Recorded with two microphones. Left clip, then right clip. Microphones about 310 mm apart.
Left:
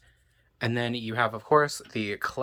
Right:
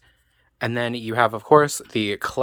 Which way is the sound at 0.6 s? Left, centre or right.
Centre.